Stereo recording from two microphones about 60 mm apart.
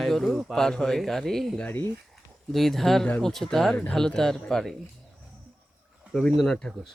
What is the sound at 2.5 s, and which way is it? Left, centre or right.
Speech, centre.